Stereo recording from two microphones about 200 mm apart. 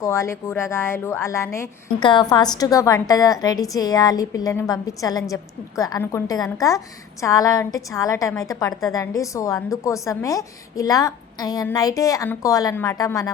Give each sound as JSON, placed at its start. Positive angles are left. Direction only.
{"t": 0.0, "sound": "a woman's voice", "side_deg": 15}